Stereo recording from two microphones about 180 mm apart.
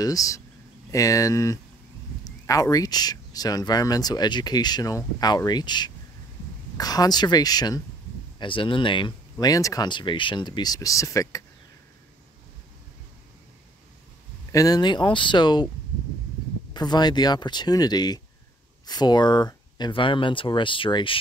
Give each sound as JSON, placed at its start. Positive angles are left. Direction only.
{"t": 0.0, "sound": "speech", "side_deg": 20}
{"t": 14.5, "sound": "speech", "side_deg": 20}
{"t": 16.7, "sound": "speech", "side_deg": 25}